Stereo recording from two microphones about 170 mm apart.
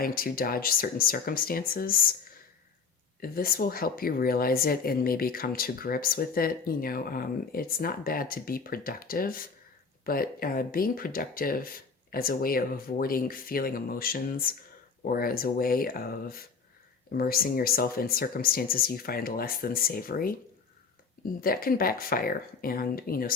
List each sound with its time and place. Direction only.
0.0 s speech: 60° left (ahead or behind)
3.2 s speech: 60° left (ahead or behind)
21.4 s speech: 60° left (ahead or behind)